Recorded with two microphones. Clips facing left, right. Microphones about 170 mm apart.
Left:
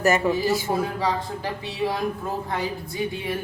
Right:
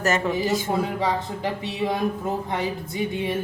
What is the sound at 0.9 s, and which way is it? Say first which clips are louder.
Speech: right 1 dB; 20° right (ahead or behind).